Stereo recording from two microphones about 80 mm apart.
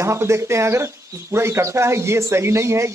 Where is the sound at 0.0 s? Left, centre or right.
Right.